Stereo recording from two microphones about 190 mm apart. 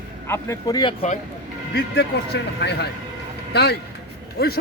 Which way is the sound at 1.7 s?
60° left (ahead or behind).